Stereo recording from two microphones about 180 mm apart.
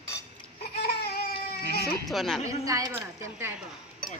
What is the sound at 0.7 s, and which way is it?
Baby cry, 60° left (ahead or behind).